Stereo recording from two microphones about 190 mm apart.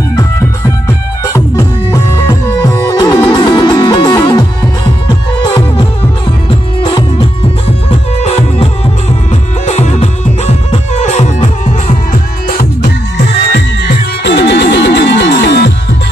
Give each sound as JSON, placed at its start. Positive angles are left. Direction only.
{"t": 0.1, "sound": "music", "side_deg": 20}
{"t": 6.8, "sound": "music", "side_deg": 25}
{"t": 8.2, "sound": "music", "side_deg": 35}
{"t": 12.4, "sound": "music", "side_deg": 55}